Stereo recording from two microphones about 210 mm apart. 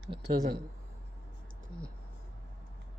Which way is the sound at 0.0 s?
50° right (ahead or behind).